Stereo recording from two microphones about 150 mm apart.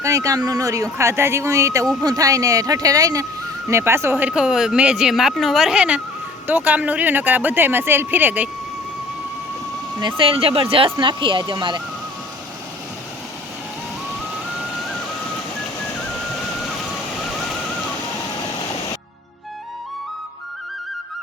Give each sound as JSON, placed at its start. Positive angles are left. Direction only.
{"t": 0.0, "sound": "speech", "side_deg": -20}
{"t": 10.0, "sound": "speech", "side_deg": -35}
{"t": 17.2, "sound": "a sound", "side_deg": 0}